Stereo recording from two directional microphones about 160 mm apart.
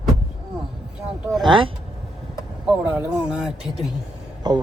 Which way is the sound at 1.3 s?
30° right (ahead or behind).